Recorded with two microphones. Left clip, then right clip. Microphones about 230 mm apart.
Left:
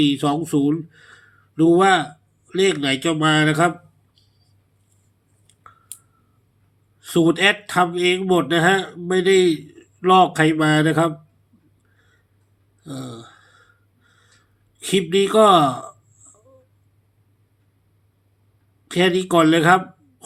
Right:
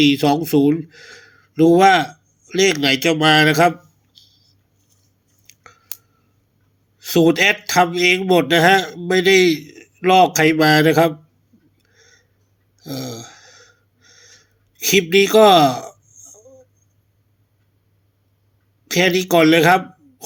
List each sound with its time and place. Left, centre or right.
0.0 s speech: right
7.0 s speech: right
11.9 s tick-tock: right
12.8 s a sound: right
14.8 s speech: right
18.9 s speech: right